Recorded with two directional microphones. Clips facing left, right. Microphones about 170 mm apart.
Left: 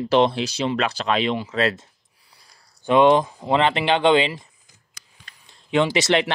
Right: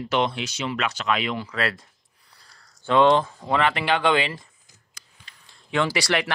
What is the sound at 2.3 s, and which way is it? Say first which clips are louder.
Speech: even; 10° left (ahead or behind).